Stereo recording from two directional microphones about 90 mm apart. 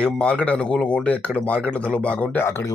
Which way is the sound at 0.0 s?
10° left (ahead or behind).